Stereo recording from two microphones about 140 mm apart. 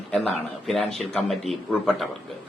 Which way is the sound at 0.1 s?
5° left (ahead or behind).